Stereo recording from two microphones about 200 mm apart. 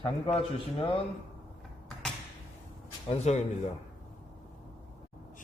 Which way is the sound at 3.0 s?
35° left (ahead or behind).